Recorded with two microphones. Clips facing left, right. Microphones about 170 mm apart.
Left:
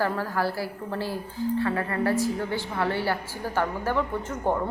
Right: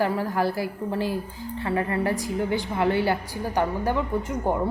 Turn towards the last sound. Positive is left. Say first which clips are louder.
# right 2 dB
turn(degrees=-15)  # may be behind; listen again after turning